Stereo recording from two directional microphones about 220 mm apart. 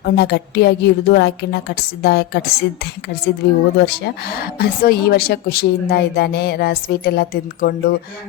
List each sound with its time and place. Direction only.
0.0 s a woman's voice: 50° left (ahead or behind)